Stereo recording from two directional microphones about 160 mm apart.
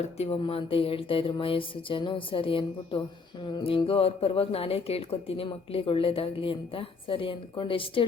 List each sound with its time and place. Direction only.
0.0 s a woman's voice: 40° left (ahead or behind)